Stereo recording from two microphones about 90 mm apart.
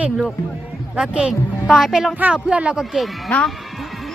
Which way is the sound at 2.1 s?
15° right (ahead or behind).